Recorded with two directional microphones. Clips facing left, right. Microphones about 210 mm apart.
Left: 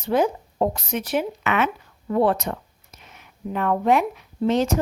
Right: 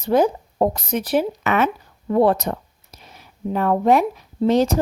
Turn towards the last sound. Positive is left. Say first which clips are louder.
# right 3 dB
turn(degrees=-35)  # may be behind; listen again after turning